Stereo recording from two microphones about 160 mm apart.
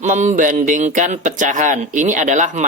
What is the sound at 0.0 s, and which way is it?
Speech, 50° right (ahead or behind).